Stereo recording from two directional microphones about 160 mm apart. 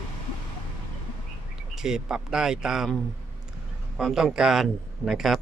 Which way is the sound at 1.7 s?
5° right (ahead or behind).